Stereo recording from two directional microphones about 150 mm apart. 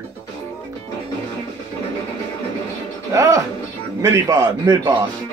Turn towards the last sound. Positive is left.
turn(degrees=-30)  # may be behind; listen again after turning